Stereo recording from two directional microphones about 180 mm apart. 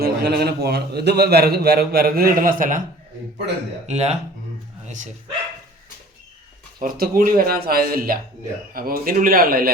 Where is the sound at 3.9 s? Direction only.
40° right (ahead or behind).